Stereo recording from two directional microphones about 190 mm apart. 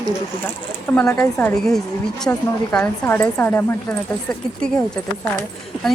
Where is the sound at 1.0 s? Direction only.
10° left (ahead or behind).